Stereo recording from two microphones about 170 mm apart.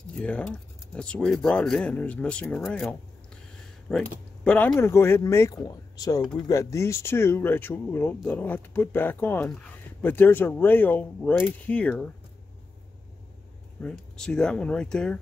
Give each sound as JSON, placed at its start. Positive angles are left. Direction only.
{"t": 0.1, "sound": "speech", "side_deg": 5}
{"t": 13.7, "sound": "speech", "side_deg": 5}